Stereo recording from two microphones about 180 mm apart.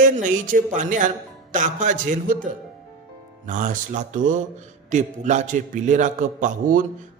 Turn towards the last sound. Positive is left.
turn(degrees=-50)  # may be behind; listen again after turning